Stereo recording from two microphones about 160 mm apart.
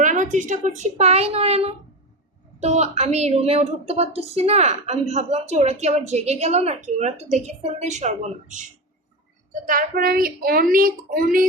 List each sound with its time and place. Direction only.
0.0 s a woman's voice: 50° right (ahead or behind)
9.5 s speech: 60° right (ahead or behind)